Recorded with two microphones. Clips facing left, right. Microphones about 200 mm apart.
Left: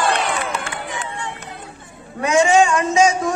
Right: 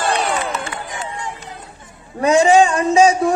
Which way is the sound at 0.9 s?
65° left (ahead or behind).